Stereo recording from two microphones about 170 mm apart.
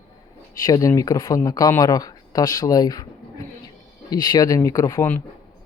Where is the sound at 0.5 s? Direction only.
20° left (ahead or behind).